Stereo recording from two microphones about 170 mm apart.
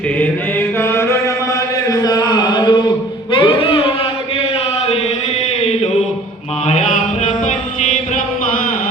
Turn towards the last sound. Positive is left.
turn(degrees=40)  # may be behind; listen again after turning